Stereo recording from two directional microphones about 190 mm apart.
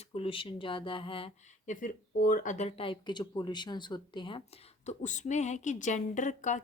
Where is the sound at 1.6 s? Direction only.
40° left (ahead or behind).